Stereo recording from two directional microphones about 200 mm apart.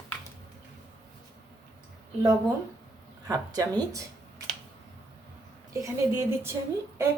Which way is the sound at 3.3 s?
20° right (ahead or behind).